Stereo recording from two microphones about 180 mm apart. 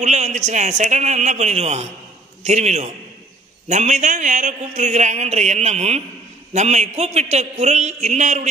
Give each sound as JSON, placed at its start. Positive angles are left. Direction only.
{"t": 0.0, "sound": "a man's voice", "side_deg": -40}